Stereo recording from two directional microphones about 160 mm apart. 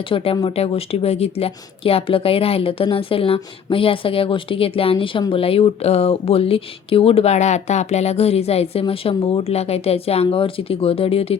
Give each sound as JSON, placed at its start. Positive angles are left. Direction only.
{"t": 0.0, "sound": "a woman's voice", "side_deg": 35}